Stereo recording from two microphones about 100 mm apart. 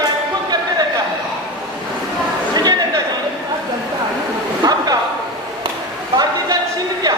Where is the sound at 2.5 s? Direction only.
40° right (ahead or behind).